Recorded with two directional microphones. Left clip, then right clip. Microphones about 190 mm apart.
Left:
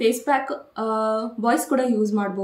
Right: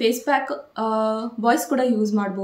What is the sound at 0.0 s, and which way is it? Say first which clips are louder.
Speech: even; 5° right (ahead or behind).